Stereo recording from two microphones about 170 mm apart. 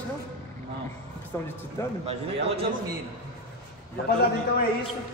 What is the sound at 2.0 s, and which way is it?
Speech, 35° right (ahead or behind).